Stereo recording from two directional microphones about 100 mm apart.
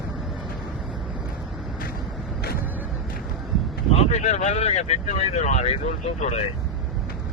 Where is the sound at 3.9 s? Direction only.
90° left.